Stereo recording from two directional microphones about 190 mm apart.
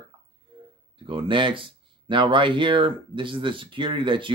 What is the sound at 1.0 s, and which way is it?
Speech, 25° right (ahead or behind).